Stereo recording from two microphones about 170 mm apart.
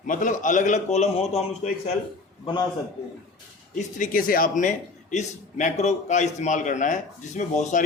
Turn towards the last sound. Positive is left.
turn(degrees=45)  # may be behind; listen again after turning